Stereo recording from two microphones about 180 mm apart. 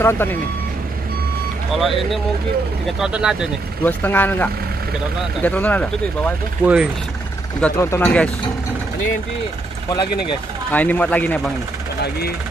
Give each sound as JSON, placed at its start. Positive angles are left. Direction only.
{"t": 0.0, "sound": "speech", "side_deg": 10}
{"t": 1.7, "sound": "speech", "side_deg": 0}
{"t": 3.8, "sound": "speech", "side_deg": 10}
{"t": 6.6, "sound": "speech", "side_deg": -5}
{"t": 7.6, "sound": "speech", "side_deg": 15}
{"t": 9.8, "sound": "speech", "side_deg": 25}
{"t": 10.7, "sound": "speech", "side_deg": 10}